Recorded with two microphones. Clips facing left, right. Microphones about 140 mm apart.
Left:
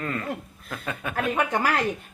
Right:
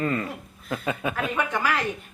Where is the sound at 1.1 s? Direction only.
45° left (ahead or behind).